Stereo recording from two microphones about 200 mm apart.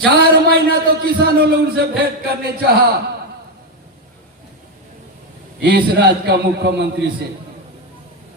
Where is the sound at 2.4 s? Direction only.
50° right (ahead or behind).